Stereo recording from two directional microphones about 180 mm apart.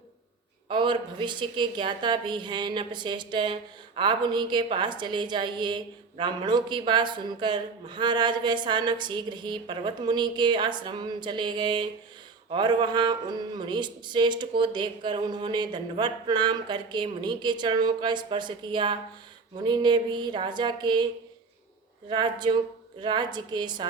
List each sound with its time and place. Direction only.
0.7 s a woman's voice: 25° right (ahead or behind)
22.1 s a woman's voice: 25° right (ahead or behind)